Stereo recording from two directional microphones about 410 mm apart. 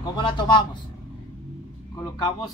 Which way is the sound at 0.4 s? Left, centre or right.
Centre.